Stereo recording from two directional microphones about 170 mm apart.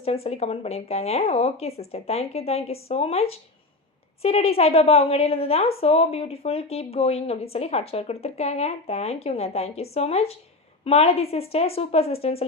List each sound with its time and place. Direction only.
0.0 s speech: 35° left (ahead or behind)